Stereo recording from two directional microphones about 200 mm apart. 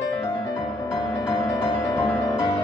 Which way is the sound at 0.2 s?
15° left (ahead or behind).